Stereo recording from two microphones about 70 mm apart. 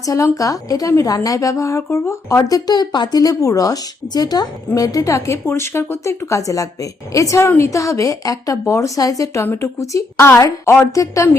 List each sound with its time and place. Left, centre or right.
0.0 s a woman's voice: left